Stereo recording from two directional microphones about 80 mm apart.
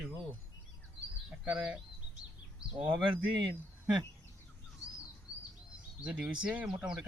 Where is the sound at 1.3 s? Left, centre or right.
Centre.